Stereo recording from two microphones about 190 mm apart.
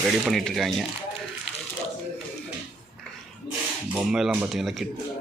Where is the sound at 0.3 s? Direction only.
Centre (ahead or behind).